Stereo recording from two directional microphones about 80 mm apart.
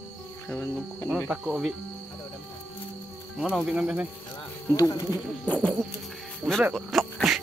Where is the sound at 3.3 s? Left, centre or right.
Centre.